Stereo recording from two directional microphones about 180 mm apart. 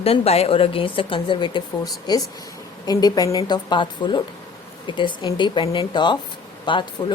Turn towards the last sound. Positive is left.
turn(degrees=25)  # may be behind; listen again after turning